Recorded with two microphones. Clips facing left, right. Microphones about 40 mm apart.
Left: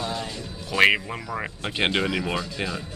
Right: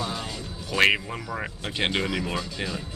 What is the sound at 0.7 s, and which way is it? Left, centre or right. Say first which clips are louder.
Speech: left 2 dB; centre.